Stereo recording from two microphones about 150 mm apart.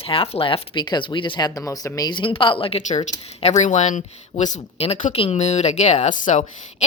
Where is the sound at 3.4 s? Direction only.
45° left (ahead or behind).